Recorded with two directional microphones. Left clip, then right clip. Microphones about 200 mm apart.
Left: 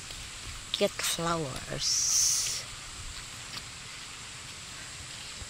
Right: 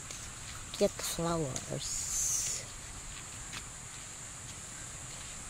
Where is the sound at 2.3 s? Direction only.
20° right (ahead or behind).